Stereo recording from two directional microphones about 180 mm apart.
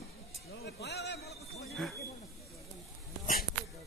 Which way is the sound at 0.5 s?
70° left (ahead or behind).